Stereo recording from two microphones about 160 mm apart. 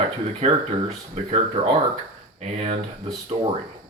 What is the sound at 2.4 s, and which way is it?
Speech, 45° right (ahead or behind).